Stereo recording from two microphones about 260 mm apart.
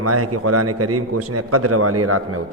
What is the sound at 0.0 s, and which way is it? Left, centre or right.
A man's voice, right.